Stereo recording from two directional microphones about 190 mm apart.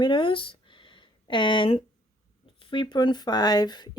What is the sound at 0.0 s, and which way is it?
Speech, 25° left (ahead or behind).